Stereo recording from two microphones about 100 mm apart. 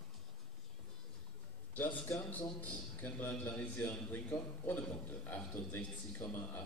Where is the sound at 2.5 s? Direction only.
15° left (ahead or behind).